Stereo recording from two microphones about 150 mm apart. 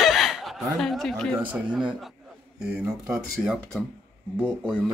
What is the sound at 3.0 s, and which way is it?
Speech, 5° right (ahead or behind).